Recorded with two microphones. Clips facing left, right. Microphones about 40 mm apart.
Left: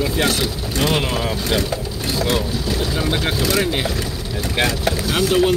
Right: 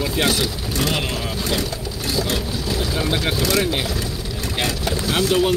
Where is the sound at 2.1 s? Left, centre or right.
Left.